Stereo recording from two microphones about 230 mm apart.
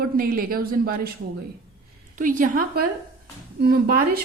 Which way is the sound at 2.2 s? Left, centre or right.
Right.